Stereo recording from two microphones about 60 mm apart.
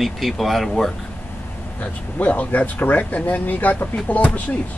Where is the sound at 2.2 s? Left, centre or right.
Left.